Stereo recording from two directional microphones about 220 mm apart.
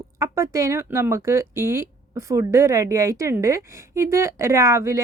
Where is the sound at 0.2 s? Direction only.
15° right (ahead or behind).